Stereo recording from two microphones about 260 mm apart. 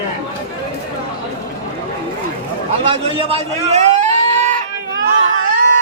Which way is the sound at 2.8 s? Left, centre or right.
Right.